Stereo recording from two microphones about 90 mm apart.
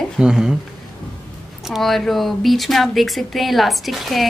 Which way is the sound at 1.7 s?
Centre (ahead or behind).